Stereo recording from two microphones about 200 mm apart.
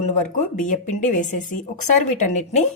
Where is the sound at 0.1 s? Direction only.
40° left (ahead or behind).